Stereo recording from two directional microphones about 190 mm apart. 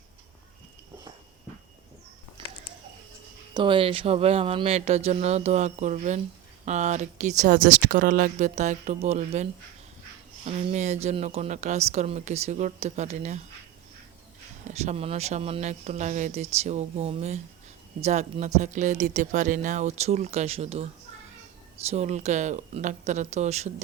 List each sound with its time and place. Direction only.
3.5 s speech: 25° right (ahead or behind)
14.6 s speech: 35° right (ahead or behind)
21.8 s speech: 35° right (ahead or behind)